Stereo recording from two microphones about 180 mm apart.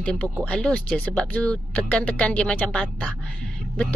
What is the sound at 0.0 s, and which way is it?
Speech, 5° left (ahead or behind).